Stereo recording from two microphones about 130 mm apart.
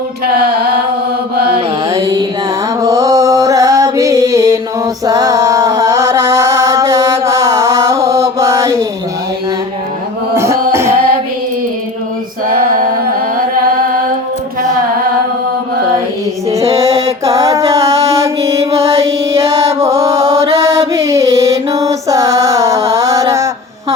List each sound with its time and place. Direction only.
1.9 s music: 25° right (ahead or behind)
2.8 s mantra: 25° right (ahead or behind)
10.3 s music: 20° right (ahead or behind)
12.5 s a sound: 90° right
16.5 s music: 25° right (ahead or behind)
19.5 s mantra: 30° right (ahead or behind)